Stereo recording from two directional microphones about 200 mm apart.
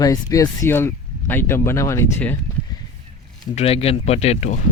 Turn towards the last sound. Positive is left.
turn(degrees=35)  # may be behind; listen again after turning